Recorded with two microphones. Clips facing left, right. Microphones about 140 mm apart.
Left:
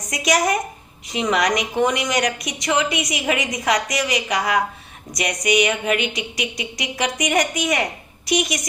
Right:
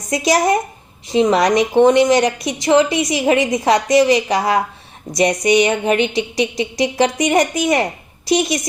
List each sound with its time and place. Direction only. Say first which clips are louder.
0.1 s a woman's voice: right 5 dB; 30° right (ahead or behind)